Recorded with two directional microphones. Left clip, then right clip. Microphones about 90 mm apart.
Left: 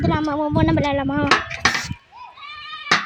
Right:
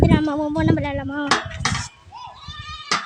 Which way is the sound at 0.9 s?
35° left (ahead or behind).